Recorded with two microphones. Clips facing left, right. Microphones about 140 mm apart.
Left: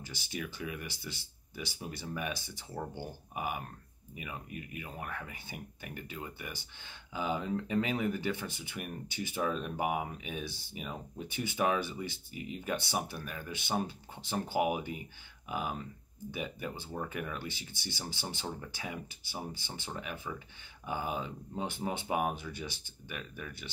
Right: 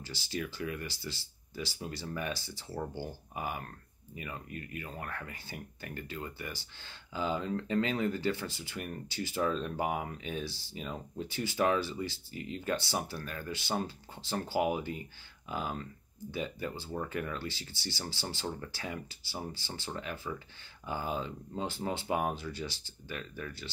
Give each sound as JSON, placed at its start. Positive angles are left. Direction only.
{"t": 0.0, "sound": "speech", "side_deg": 20}
{"t": 2.7, "sound": "speech", "side_deg": -5}
{"t": 3.0, "sound": "speech", "side_deg": 15}